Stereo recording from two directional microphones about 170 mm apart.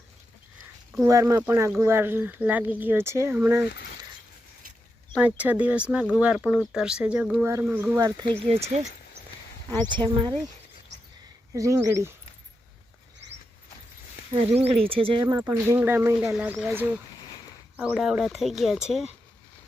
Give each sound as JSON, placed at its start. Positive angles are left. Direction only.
{"t": 1.0, "sound": "speech", "side_deg": -20}
{"t": 5.1, "sound": "speech", "side_deg": -10}
{"t": 8.4, "sound": "speech", "side_deg": -40}
{"t": 9.9, "sound": "speech", "side_deg": -30}
{"t": 11.5, "sound": "speech", "side_deg": -20}
{"t": 14.3, "sound": "speech", "side_deg": -40}